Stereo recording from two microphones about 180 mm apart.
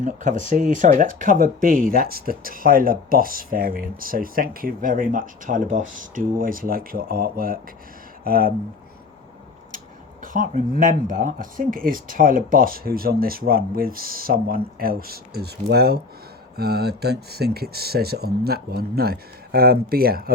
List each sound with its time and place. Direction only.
0.0 s speech: 45° right (ahead or behind)
9.7 s a sound: 45° right (ahead or behind)
11.1 s speech: 50° right (ahead or behind)